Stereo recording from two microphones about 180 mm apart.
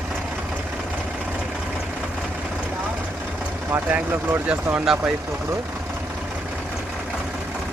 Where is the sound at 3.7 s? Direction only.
10° right (ahead or behind).